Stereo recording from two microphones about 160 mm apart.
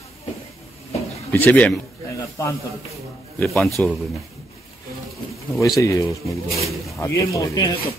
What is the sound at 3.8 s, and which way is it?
Speech, 10° left (ahead or behind).